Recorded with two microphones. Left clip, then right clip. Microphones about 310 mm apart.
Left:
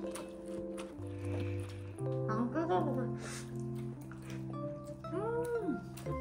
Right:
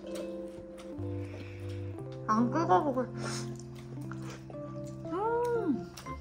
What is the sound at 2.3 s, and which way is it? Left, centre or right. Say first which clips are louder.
Speech: right 9 dB; centre.